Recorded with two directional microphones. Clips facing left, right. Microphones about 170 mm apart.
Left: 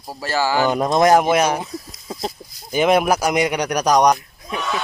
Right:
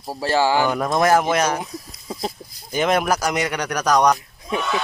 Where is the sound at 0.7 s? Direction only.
20° left (ahead or behind).